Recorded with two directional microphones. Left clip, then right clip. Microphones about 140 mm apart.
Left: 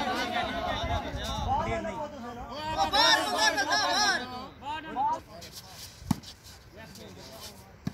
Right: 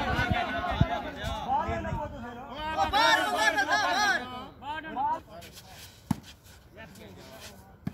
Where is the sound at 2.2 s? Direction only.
5° left (ahead or behind).